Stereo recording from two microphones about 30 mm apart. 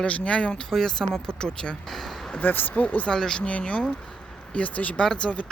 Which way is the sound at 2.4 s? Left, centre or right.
Left.